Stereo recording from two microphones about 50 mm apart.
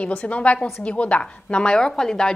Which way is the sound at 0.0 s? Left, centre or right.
Left.